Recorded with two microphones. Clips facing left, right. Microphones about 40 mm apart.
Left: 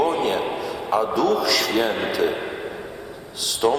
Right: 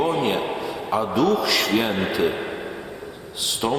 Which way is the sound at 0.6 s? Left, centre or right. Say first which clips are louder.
Left 2 dB; right.